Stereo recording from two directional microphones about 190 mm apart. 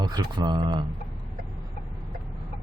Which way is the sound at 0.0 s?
20° right (ahead or behind).